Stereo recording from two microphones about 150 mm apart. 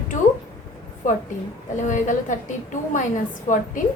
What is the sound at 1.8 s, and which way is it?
A woman's voice, 60° left (ahead or behind).